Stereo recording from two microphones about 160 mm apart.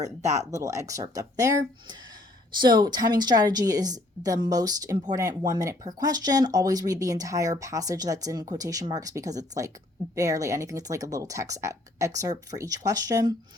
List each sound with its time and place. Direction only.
0.3 s a woman's voice: 20° right (ahead or behind)